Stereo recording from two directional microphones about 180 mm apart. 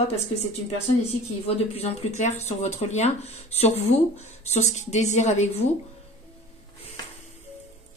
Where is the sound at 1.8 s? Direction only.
35° left (ahead or behind).